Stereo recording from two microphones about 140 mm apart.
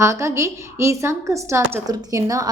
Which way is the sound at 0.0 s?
20° right (ahead or behind).